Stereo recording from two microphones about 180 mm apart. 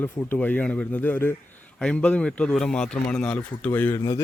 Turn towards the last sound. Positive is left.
turn(degrees=15)  # may be behind; listen again after turning